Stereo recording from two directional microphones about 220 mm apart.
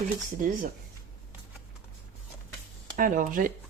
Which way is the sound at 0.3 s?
40° right (ahead or behind).